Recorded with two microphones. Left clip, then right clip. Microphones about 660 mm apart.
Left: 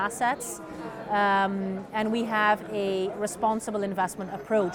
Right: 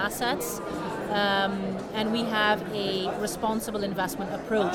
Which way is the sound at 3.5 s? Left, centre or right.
Left.